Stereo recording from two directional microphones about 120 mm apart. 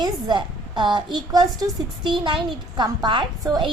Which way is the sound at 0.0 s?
40° right (ahead or behind).